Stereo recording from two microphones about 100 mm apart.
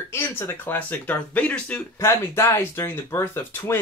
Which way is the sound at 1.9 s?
25° left (ahead or behind).